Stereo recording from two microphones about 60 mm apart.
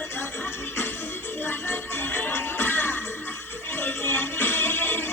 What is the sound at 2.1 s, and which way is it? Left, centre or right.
Music, left.